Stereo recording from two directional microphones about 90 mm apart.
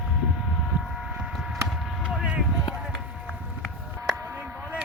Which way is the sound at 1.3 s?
5° right (ahead or behind).